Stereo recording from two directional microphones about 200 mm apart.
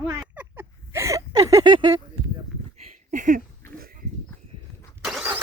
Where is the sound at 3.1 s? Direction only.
40° right (ahead or behind).